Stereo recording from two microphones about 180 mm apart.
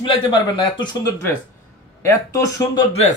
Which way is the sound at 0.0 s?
25° left (ahead or behind).